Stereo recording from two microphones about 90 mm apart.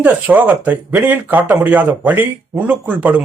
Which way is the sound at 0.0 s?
20° right (ahead or behind).